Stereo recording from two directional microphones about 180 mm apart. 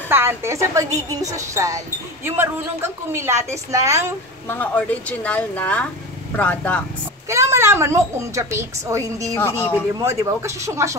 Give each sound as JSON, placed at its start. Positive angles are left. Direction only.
{"t": 0.1, "sound": "a woman's voice", "side_deg": -15}
{"t": 4.5, "sound": "speech", "side_deg": 10}
{"t": 7.2, "sound": "a woman's voice", "side_deg": -15}
{"t": 9.4, "sound": "speech", "side_deg": 10}
{"t": 9.9, "sound": "a woman's voice", "side_deg": -15}